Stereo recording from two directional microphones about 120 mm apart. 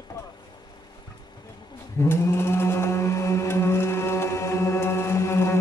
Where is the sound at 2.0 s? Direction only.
20° left (ahead or behind).